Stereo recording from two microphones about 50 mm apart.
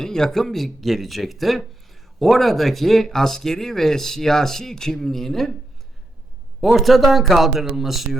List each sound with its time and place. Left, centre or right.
0.0 s speech: centre
6.7 s speech: centre